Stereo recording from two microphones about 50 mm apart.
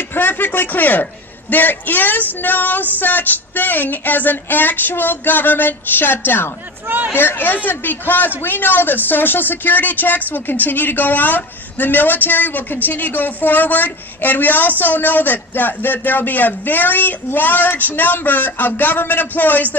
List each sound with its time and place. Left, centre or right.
0.1 s speech: left